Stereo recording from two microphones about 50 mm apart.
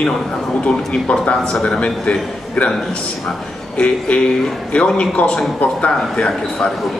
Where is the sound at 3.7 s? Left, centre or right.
Left.